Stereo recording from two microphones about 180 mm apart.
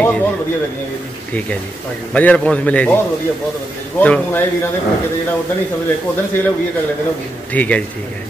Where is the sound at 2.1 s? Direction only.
5° left (ahead or behind).